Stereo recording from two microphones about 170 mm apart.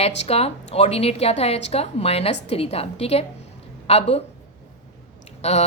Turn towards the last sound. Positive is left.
turn(degrees=40)  # may be behind; listen again after turning